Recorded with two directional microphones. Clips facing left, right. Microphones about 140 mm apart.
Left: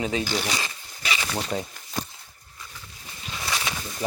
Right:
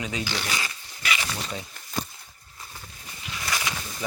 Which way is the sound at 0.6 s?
30° left (ahead or behind).